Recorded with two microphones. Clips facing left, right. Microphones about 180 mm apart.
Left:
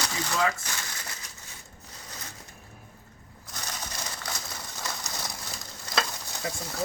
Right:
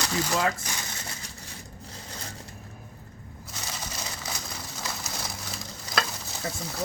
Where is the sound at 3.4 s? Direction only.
5° right (ahead or behind).